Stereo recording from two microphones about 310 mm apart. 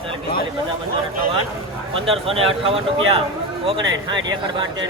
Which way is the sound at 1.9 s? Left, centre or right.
Centre.